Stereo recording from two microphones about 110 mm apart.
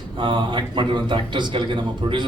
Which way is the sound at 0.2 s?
45° right (ahead or behind).